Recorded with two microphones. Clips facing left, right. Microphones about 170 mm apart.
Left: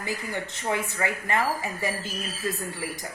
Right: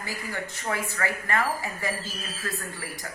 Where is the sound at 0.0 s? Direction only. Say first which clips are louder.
Left 3 dB; 20° left (ahead or behind).